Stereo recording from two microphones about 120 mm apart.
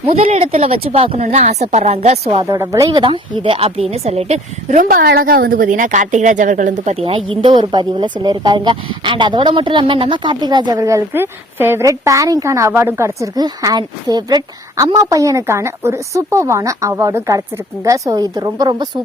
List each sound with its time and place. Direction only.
0.0 s a woman's voice: 55° right (ahead or behind)
1.2 s a woman's voice: 65° right (ahead or behind)
2.4 s a woman's voice: 25° right (ahead or behind)
2.9 s a woman's voice: 45° right (ahead or behind); by 4.9 s 80° right
5.6 s speech: 90° right
7.4 s a woman's voice: 40° right (ahead or behind)